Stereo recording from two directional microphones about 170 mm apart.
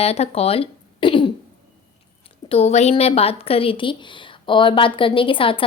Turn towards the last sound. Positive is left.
turn(degrees=30)  # may be behind; listen again after turning